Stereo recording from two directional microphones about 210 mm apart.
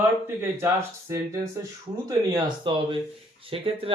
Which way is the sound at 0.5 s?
10° right (ahead or behind).